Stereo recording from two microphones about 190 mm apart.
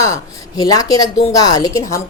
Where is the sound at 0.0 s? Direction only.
15° left (ahead or behind).